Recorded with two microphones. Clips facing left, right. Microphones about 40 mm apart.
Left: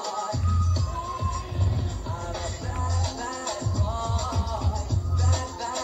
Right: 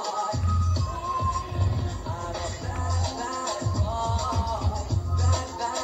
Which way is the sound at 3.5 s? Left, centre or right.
Right.